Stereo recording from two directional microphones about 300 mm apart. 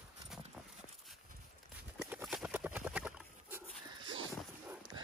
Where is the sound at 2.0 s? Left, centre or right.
Centre.